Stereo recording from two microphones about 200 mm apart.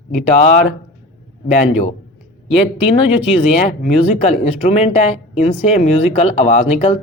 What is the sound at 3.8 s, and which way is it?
Speech, 35° left (ahead or behind).